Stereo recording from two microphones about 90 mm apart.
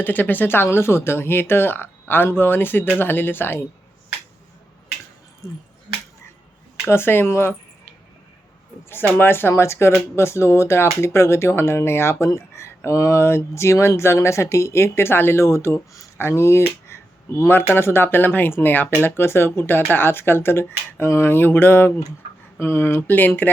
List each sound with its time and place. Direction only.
0.0 s speech: 20° left (ahead or behind)
5.4 s speech: 35° left (ahead or behind)
6.8 s speech: 25° left (ahead or behind)
9.1 s speech: 25° left (ahead or behind)